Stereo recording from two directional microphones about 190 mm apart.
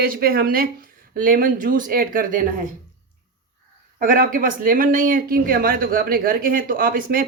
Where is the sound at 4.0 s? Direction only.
45° right (ahead or behind).